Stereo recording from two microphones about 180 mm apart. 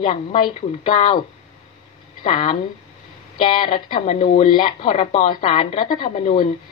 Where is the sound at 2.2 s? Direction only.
30° left (ahead or behind).